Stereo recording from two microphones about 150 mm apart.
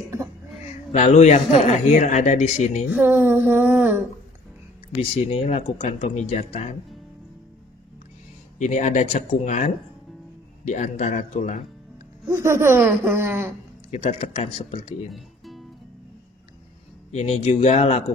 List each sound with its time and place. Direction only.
0.9 s speech: 50° left (ahead or behind)
2.9 s speech: 15° right (ahead or behind)
4.9 s speech: 40° left (ahead or behind)
8.5 s speech: 50° left (ahead or behind)
12.3 s speech: 20° right (ahead or behind)
13.8 s speech: 40° left (ahead or behind)
15.1 s music: centre (ahead or behind)
17.1 s speech: 45° left (ahead or behind)